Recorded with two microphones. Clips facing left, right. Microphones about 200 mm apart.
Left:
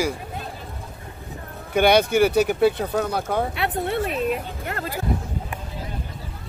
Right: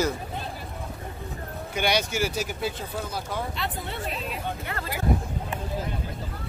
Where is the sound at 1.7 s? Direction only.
55° left (ahead or behind).